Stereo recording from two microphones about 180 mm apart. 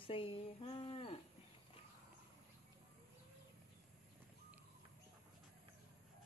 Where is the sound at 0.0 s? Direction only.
30° left (ahead or behind).